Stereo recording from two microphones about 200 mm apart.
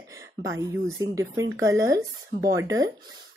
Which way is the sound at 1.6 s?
15° right (ahead or behind).